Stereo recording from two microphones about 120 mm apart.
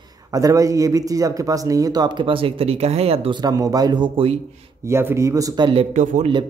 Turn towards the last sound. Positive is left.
turn(degrees=-80)